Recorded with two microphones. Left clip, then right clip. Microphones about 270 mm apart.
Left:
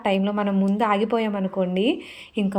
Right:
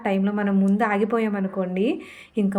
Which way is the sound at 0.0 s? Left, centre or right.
Centre.